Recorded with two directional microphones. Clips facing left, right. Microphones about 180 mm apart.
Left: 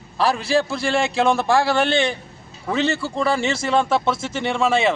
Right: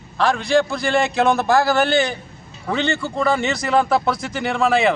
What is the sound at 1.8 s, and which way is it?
Speech, 25° left (ahead or behind).